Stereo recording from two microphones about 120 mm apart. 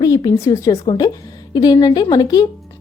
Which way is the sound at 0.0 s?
30° left (ahead or behind).